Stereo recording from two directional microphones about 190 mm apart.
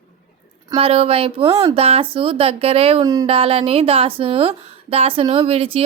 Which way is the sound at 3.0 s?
20° right (ahead or behind).